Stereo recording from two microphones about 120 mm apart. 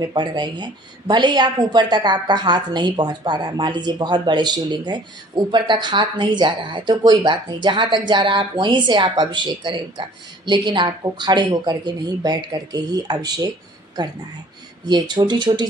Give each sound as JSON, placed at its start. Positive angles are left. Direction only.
{"t": 0.0, "sound": "speech", "side_deg": -35}